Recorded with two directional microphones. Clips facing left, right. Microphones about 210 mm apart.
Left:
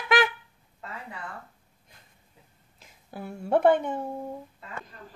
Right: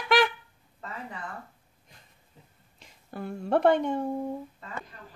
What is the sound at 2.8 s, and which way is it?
Speech, 5° left (ahead or behind).